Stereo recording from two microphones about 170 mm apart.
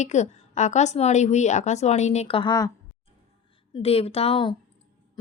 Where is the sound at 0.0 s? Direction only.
45° left (ahead or behind); by 2.7 s 25° left (ahead or behind).